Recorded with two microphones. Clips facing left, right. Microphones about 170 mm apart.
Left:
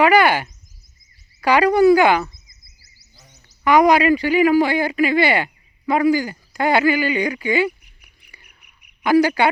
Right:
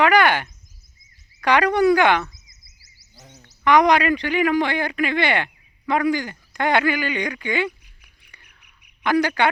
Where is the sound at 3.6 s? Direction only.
5° left (ahead or behind).